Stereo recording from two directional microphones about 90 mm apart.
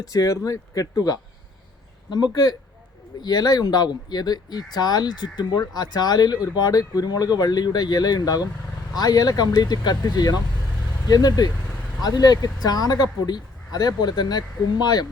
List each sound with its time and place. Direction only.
0.0 s speech: 40° left (ahead or behind)